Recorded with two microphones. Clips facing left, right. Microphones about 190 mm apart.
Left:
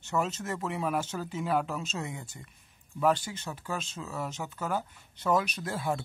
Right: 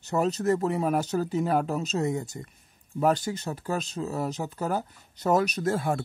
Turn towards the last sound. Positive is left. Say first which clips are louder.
# right 6 dB
turn(degrees=-45)  # may be behind; listen again after turning